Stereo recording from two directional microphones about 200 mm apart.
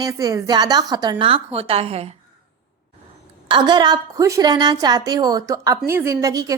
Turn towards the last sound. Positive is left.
turn(degrees=-20)  # may be behind; listen again after turning